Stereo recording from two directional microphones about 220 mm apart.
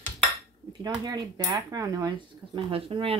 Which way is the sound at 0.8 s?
15° right (ahead or behind).